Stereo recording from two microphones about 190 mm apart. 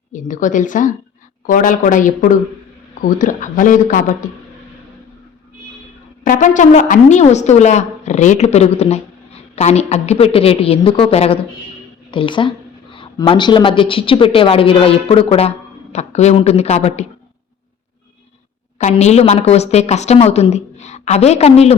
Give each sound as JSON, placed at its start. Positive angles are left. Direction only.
{"t": 0.1, "sound": "speech", "side_deg": 45}
{"t": 6.2, "sound": "a woman's voice", "side_deg": 45}
{"t": 18.8, "sound": "speech", "side_deg": 35}